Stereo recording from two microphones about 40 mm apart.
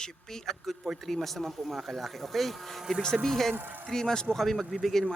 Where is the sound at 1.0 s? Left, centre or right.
Centre.